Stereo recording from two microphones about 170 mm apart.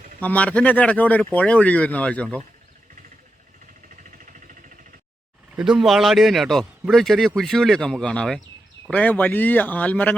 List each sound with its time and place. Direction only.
0.2 s speech: 10° left (ahead or behind)
3.8 s a sound: 50° right (ahead or behind)
5.5 s speech: centre (ahead or behind)